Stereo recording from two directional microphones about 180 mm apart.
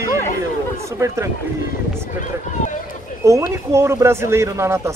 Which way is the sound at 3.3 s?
15° right (ahead or behind).